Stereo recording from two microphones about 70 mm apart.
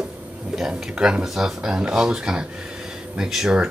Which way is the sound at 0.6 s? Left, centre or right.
Centre.